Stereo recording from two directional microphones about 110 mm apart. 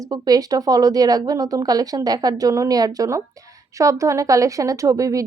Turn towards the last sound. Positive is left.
turn(degrees=-30)  # may be behind; listen again after turning